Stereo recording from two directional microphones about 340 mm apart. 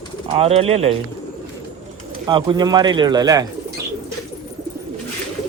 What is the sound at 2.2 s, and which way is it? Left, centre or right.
Speech, centre.